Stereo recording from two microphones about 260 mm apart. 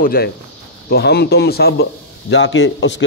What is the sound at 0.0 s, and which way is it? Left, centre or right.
Speech, left.